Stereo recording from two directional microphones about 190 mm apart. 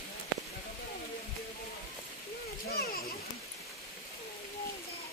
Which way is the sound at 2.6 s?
55° left (ahead or behind).